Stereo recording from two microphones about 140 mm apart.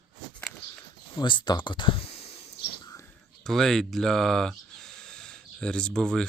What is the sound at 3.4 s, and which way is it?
Speech, 5° left (ahead or behind).